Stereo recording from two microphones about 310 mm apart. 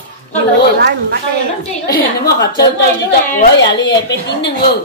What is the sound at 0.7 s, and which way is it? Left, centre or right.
Speech, right.